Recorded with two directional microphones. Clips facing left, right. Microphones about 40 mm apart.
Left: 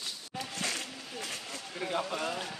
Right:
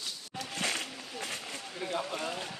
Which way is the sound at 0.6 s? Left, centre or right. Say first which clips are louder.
Right 3 dB; right.